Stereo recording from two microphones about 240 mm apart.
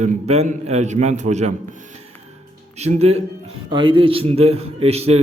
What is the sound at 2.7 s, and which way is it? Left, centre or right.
A man's voice, right.